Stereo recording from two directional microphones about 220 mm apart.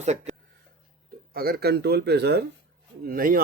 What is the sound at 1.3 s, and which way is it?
A man's voice, 45° right (ahead or behind).